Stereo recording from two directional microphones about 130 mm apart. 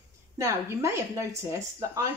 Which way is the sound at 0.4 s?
20° right (ahead or behind).